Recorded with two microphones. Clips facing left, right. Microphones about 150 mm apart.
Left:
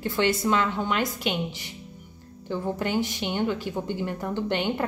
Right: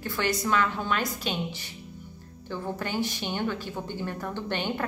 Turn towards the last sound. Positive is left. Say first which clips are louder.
# left 4 dB
turn(degrees=20)  # may be behind; listen again after turning